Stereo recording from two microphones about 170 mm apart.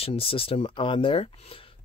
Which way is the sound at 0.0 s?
35° left (ahead or behind).